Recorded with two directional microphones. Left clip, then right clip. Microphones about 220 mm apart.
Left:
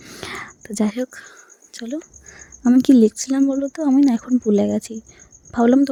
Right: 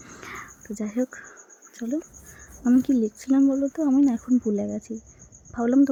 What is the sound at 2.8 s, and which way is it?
Speech, 35° left (ahead or behind).